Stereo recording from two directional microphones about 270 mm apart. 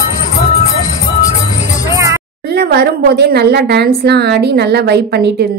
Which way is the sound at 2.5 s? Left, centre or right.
Right.